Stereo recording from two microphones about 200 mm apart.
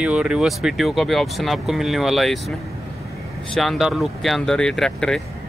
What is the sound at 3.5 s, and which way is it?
Speech, centre (ahead or behind).